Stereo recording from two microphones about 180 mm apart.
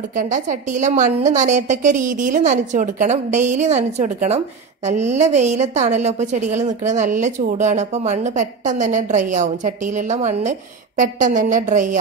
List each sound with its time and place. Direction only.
0.1 s a woman's voice: 45° right (ahead or behind)